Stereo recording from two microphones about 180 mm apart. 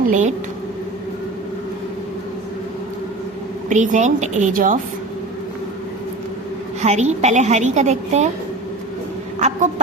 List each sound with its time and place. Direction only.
0.1 s a woman's voice: 40° right (ahead or behind)
3.7 s a woman's voice: 40° right (ahead or behind)
6.8 s a woman's voice: 40° right (ahead or behind)
9.4 s a sound: 40° right (ahead or behind)